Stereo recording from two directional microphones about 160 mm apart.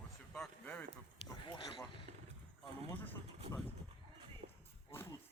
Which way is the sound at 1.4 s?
30° left (ahead or behind).